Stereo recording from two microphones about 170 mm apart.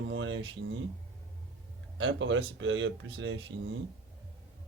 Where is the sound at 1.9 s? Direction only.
90° right.